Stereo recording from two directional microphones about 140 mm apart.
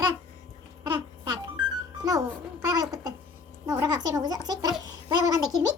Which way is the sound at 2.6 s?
25° right (ahead or behind).